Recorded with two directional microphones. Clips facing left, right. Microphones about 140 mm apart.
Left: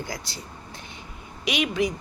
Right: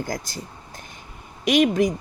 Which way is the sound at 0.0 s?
45° right (ahead or behind).